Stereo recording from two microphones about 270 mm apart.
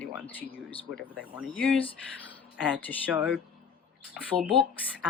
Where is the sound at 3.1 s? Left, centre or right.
Centre.